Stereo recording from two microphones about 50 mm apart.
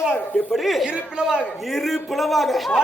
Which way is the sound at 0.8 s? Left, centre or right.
Centre.